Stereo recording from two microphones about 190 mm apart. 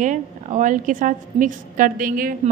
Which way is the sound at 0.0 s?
40° right (ahead or behind).